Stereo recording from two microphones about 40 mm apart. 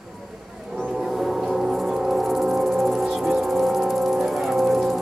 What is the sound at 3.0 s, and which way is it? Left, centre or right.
Music, centre.